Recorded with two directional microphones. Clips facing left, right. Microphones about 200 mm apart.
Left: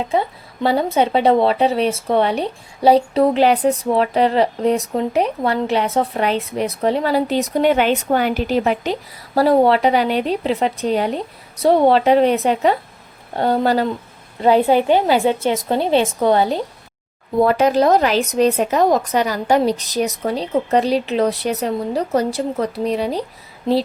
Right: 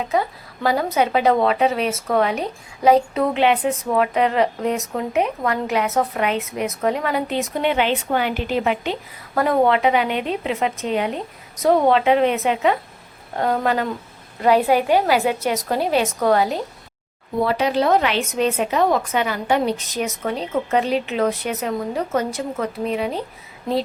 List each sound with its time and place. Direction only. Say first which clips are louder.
0.1 s a woman's voice: left 2 dB; 30° left (ahead or behind)
17.4 s speech: left 5 dB; 45° left (ahead or behind)